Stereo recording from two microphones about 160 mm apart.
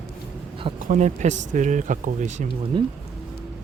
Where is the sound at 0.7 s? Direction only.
55° right (ahead or behind).